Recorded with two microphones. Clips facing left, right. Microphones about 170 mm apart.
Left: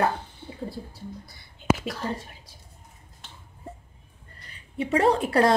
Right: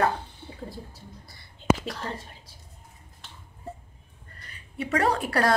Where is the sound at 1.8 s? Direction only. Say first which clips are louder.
Left 2 dB; 5° left (ahead or behind).